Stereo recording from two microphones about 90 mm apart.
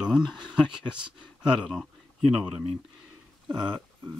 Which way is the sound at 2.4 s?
15° right (ahead or behind).